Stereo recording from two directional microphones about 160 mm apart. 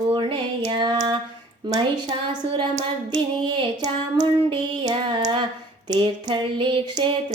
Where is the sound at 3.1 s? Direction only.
25° right (ahead or behind).